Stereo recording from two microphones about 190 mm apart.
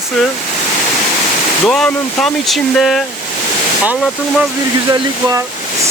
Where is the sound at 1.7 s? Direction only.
5° left (ahead or behind).